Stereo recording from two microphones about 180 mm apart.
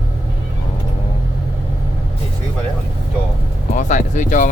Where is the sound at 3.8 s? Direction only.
45° left (ahead or behind).